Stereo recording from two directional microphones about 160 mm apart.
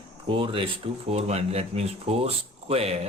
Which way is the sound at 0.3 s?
35° right (ahead or behind).